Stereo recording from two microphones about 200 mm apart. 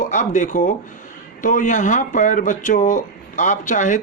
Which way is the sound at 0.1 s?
40° left (ahead or behind).